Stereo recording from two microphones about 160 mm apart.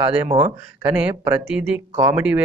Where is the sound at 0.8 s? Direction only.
10° right (ahead or behind).